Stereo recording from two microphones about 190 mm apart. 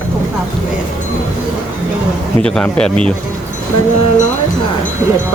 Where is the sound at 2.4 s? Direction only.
5° left (ahead or behind).